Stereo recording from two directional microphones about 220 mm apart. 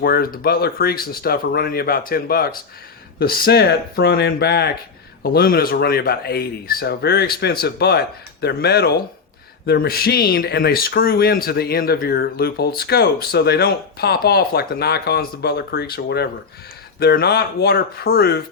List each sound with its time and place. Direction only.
0.0 s speech: 40° left (ahead or behind)